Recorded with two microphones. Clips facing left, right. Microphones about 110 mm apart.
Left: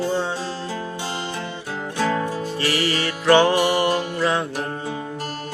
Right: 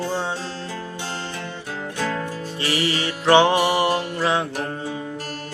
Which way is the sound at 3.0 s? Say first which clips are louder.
Even; 20° right (ahead or behind).